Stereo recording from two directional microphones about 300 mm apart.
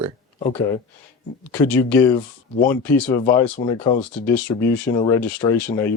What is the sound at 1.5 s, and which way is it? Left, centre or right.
Speech, centre.